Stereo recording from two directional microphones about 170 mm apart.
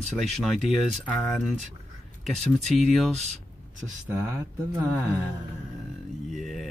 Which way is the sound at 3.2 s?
45° right (ahead or behind).